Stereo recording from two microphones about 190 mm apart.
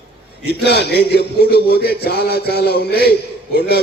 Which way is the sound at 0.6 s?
60° left (ahead or behind).